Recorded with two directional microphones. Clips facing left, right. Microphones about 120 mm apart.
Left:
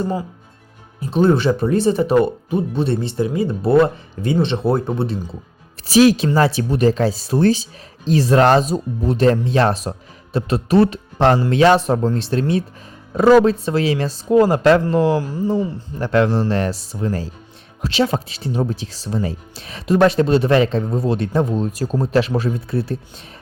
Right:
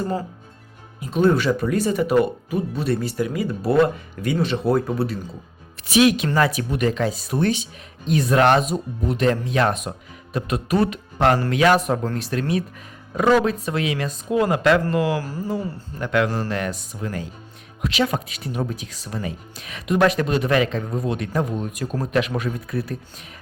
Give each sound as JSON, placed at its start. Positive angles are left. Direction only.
{"t": 0.9, "sound": "speech", "side_deg": 30}
{"t": 16.0, "sound": "speech", "side_deg": 30}